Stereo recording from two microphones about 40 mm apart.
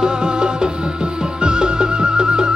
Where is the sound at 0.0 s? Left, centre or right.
Right.